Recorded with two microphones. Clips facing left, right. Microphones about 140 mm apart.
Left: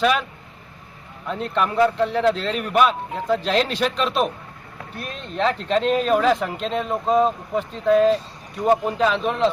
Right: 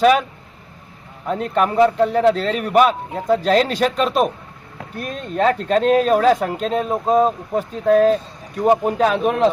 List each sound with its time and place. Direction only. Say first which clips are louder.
0.0 s a man's voice: right 6 dB; 45° right (ahead or behind)
1.3 s a man's voice: right 4 dB; 45° right (ahead or behind)